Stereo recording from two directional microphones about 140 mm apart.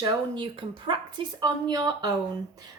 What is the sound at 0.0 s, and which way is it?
Speech, 35° right (ahead or behind).